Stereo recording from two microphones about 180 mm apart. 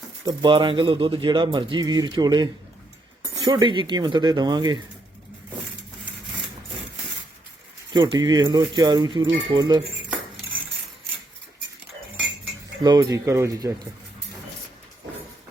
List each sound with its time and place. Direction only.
0.3 s speech: 25° right (ahead or behind)
7.9 s speech: 20° right (ahead or behind)
12.8 s speech: 20° right (ahead or behind)